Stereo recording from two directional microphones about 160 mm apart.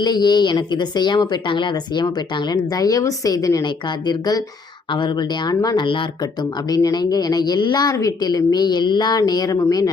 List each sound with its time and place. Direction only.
0.0 s speech: 25° left (ahead or behind)